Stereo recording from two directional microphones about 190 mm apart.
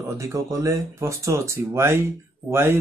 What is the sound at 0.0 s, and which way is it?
Speech, 15° right (ahead or behind).